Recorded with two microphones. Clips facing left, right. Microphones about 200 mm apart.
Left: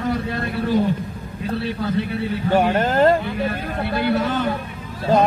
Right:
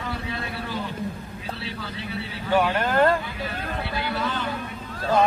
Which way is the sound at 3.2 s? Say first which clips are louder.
Left 8 dB; 55° left (ahead or behind).